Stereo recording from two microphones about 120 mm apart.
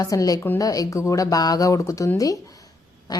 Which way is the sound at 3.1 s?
30° left (ahead or behind).